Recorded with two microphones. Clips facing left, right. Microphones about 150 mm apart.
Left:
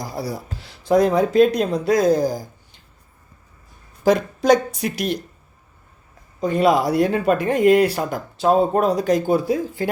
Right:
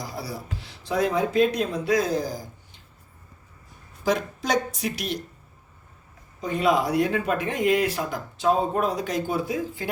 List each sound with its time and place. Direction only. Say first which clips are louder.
0.0 s speech: left 6 dB; 40° left (ahead or behind)
4.0 s a woman's voice: left 9 dB; 50° left (ahead or behind)
6.4 s speech: left 5 dB; 35° left (ahead or behind)
7.3 s a woman's voice: left 8 dB; 50° left (ahead or behind)